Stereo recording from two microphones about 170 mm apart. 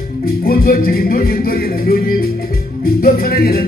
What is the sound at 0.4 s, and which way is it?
Speech, 60° left (ahead or behind).